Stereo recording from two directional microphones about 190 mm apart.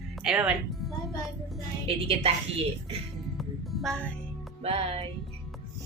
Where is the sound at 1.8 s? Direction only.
30° right (ahead or behind).